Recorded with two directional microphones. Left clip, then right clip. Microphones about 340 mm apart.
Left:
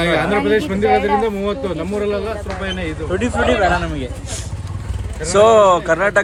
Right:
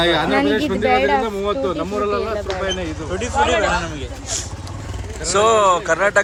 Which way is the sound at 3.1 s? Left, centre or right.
Left.